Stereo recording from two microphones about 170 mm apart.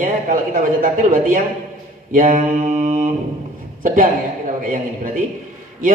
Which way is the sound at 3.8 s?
55° right (ahead or behind).